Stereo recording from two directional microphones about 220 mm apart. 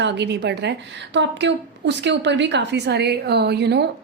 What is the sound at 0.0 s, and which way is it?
A woman's voice, 50° right (ahead or behind).